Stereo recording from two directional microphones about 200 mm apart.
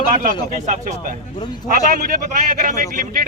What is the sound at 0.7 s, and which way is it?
A man's voice, 35° right (ahead or behind).